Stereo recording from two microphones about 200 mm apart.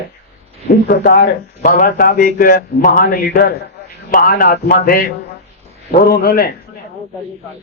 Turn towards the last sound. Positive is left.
turn(degrees=50)  # may be behind; listen again after turning